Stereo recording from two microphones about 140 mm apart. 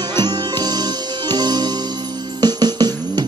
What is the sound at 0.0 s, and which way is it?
Music, 30° right (ahead or behind).